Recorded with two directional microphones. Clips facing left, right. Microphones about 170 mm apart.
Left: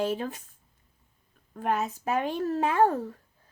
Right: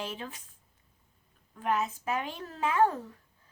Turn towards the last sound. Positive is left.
turn(degrees=45)  # may be behind; listen again after turning